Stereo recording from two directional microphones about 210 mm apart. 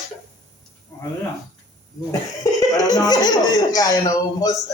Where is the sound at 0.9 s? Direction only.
15° left (ahead or behind).